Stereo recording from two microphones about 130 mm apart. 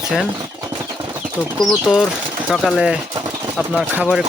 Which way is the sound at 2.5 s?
Centre (ahead or behind).